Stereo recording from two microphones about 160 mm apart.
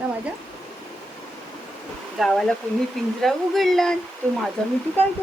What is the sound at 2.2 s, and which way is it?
Speech, centre (ahead or behind).